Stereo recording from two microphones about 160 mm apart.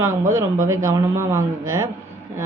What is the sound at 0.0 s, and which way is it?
Speech, 15° right (ahead or behind).